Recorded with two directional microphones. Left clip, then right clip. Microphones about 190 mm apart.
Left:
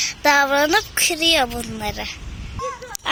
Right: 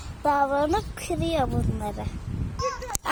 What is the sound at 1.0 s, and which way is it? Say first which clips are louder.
A woman's voice: left 9 dB; 5° right (ahead or behind).